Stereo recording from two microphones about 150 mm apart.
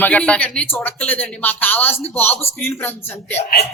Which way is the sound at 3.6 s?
90° left.